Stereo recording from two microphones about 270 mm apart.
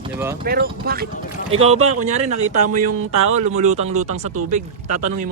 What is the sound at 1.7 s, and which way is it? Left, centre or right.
Speech, right.